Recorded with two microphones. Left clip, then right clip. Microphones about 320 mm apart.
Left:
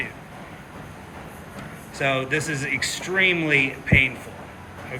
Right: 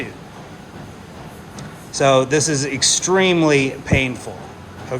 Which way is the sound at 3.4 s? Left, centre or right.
Centre.